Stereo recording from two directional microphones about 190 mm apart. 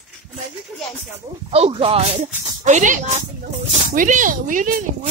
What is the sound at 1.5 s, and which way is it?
Speech, 30° right (ahead or behind).